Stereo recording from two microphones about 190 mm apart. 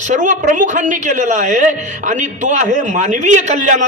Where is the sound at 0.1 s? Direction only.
40° right (ahead or behind).